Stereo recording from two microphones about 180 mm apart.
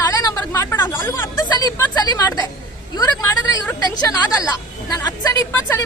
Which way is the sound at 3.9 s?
20° left (ahead or behind).